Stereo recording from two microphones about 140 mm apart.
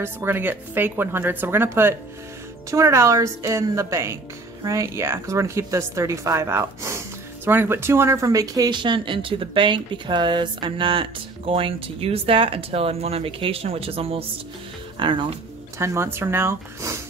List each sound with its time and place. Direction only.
0.0 s a woman's voice: 15° right (ahead or behind); by 15.3 s 35° right (ahead or behind)
15.8 s speech: 20° right (ahead or behind)